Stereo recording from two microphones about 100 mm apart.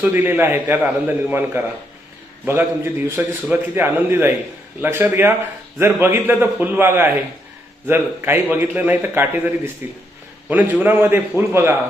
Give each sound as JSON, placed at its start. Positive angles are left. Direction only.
{"t": 0.1, "sound": "a man's voice", "side_deg": -20}